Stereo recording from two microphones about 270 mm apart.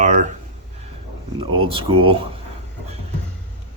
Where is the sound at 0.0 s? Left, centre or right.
Right.